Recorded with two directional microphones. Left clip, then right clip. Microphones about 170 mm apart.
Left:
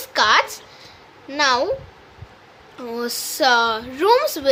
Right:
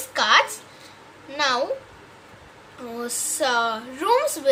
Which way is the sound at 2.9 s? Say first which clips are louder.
Left 4 dB; 60° left (ahead or behind).